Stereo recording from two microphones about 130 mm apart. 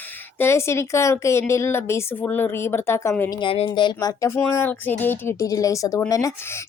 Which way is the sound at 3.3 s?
45° left (ahead or behind).